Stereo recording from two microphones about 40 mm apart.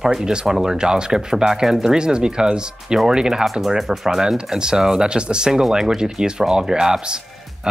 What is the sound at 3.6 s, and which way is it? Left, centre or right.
Speech, centre.